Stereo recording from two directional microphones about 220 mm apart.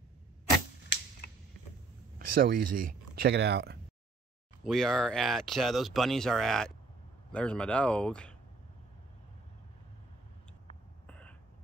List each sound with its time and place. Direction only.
2.1 s speech: 40° right (ahead or behind)
4.6 s speech: centre (ahead or behind)
11.1 s a sound: 5° left (ahead or behind)